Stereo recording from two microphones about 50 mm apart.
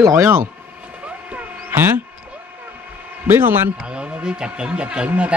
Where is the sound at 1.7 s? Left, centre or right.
Right.